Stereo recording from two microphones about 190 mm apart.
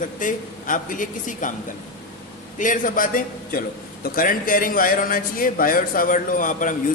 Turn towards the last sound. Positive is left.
turn(degrees=45)  # may be behind; listen again after turning